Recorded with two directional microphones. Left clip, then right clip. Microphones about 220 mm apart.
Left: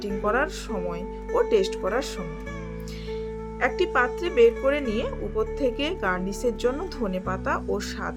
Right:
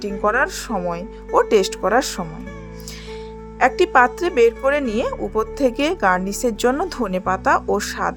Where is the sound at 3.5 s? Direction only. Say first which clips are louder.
Right 9 dB; 45° right (ahead or behind).